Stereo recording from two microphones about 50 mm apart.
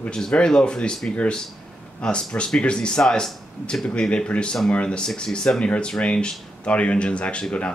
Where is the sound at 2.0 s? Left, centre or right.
Centre.